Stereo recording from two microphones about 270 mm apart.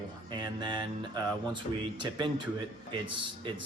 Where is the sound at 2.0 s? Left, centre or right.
Centre.